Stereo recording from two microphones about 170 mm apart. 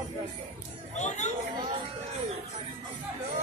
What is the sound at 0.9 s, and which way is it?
Chatter, 45° left (ahead or behind).